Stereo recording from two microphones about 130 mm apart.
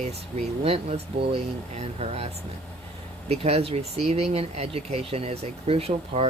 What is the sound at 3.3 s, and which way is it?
Speech, 50° right (ahead or behind).